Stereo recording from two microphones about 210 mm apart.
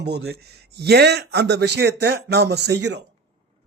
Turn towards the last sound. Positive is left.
turn(degrees=-55)  # may be behind; listen again after turning